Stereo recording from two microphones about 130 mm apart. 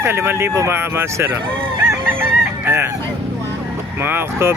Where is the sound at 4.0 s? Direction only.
15° right (ahead or behind).